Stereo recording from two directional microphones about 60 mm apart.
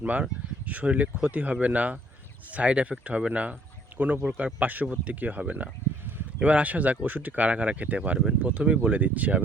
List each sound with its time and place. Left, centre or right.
0.0 s speech: right